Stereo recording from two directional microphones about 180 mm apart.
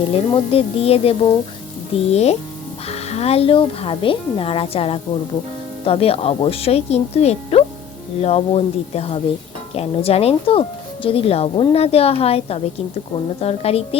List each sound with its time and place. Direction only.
0.1 s speech: 30° left (ahead or behind)